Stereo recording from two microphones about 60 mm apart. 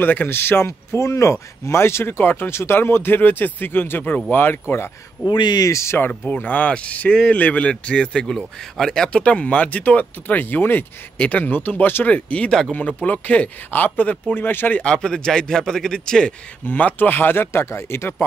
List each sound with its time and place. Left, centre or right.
0.0 s speech: left
5.6 s speech: left
5.9 s speech: left
12.1 s speech: left
14.8 s speech: centre
16.6 s speech: left